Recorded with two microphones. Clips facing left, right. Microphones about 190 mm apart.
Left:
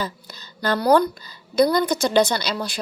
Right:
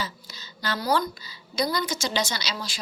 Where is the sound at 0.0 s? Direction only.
55° left (ahead or behind).